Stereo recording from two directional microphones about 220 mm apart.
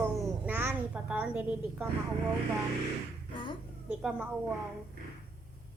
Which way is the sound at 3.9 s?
5° right (ahead or behind).